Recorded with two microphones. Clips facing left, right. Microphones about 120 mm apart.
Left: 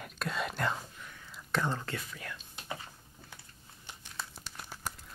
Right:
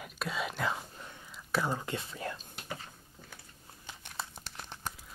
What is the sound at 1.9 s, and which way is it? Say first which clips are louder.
Speech: right 4 dB; 30° right (ahead or behind).